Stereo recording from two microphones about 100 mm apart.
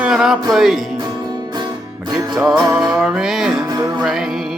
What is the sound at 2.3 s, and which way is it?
Music, 5° right (ahead or behind).